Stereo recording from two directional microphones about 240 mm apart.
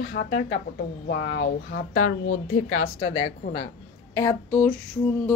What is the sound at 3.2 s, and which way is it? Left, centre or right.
A woman's voice, left.